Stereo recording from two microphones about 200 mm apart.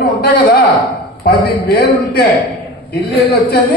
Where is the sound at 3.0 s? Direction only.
50° left (ahead or behind).